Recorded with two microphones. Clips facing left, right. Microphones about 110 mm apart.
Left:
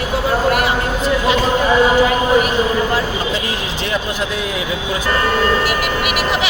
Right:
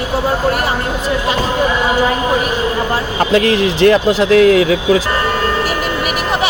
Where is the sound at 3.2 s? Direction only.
75° right (ahead or behind).